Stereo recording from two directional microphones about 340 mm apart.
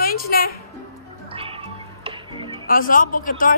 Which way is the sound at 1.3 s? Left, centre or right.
Centre.